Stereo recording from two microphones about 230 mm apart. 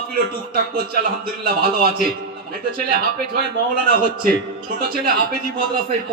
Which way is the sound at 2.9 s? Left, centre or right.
Right.